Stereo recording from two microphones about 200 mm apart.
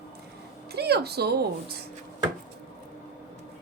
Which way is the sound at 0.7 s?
55° right (ahead or behind).